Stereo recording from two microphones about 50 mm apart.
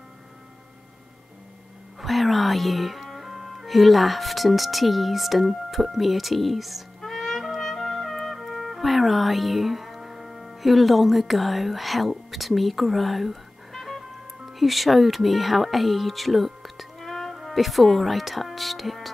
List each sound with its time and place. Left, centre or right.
2.0 s speech: centre
7.0 s music: centre
14.6 s speech: centre